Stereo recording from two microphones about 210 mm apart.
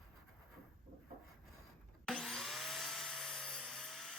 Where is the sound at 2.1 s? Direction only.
Centre (ahead or behind).